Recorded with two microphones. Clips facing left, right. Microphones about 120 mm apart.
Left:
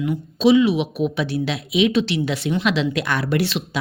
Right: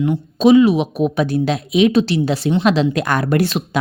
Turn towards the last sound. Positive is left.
turn(degrees=-45)  # may be behind; listen again after turning